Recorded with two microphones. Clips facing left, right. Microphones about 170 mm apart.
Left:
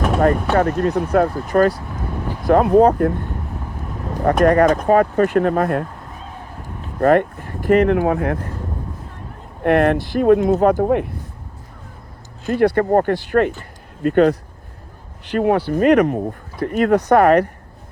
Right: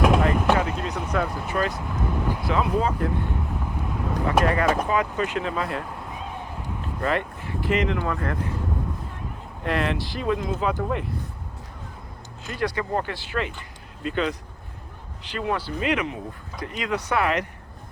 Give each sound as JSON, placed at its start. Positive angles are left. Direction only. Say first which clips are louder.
{"t": 0.2, "sound": "speech", "louder": "left 6 dB", "side_deg": 50}
{"t": 2.5, "sound": "speech", "louder": "left 13 dB", "side_deg": 55}
{"t": 4.4, "sound": "speech", "louder": "left 9 dB", "side_deg": 50}
{"t": 7.0, "sound": "speech", "louder": "left 12 dB", "side_deg": 50}
{"t": 9.6, "sound": "speech", "louder": "left 10 dB", "side_deg": 55}
{"t": 12.5, "sound": "speech", "louder": "left 12 dB", "side_deg": 55}